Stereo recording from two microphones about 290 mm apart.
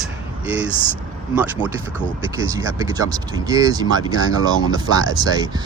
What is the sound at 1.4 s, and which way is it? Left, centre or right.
Speech, centre.